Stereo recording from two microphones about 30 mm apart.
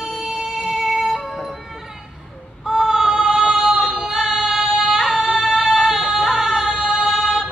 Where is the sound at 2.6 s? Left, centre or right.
Centre.